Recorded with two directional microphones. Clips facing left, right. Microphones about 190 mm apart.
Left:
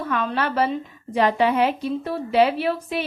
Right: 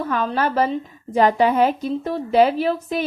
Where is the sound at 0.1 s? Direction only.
40° right (ahead or behind).